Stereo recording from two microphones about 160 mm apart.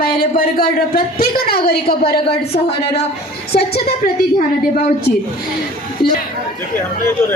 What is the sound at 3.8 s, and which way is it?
A woman's voice, 65° left (ahead or behind).